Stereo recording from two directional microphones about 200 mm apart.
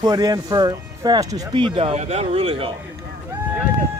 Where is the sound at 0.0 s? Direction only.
20° right (ahead or behind).